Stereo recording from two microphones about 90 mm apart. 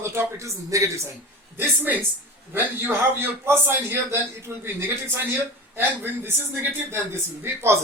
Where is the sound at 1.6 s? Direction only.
20° right (ahead or behind).